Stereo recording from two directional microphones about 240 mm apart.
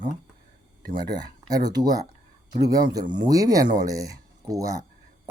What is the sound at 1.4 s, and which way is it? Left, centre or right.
Speech, centre.